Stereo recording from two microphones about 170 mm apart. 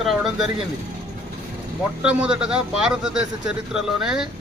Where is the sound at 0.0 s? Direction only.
Centre (ahead or behind).